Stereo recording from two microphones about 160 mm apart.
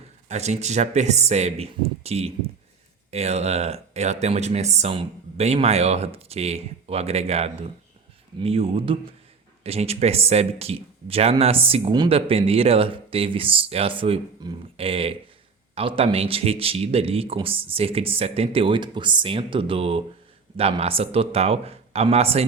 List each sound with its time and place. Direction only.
0.3 s speech: 45° right (ahead or behind)